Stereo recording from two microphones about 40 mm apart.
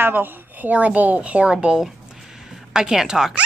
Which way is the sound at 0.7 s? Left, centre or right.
Right.